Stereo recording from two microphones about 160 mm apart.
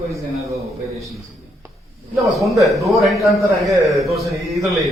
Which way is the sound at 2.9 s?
Centre (ahead or behind).